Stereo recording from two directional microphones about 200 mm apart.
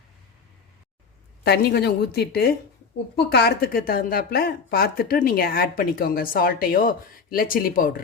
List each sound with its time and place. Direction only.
1.5 s a woman's voice: 55° left (ahead or behind)